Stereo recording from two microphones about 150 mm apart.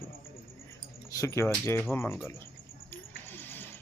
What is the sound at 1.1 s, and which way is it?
Speech, 20° left (ahead or behind).